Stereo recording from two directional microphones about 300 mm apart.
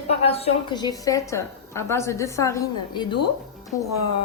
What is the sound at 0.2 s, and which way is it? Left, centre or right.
A woman's voice, centre.